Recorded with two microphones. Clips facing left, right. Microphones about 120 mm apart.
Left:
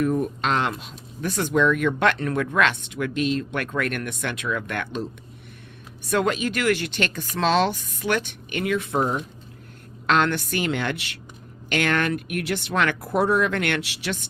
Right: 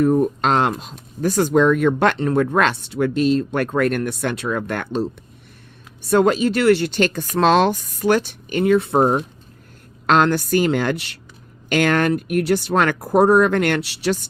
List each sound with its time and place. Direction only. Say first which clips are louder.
0.0 s speech: right 6 dB; 35° right (ahead or behind)
10.1 s speech: right 5 dB; 40° right (ahead or behind)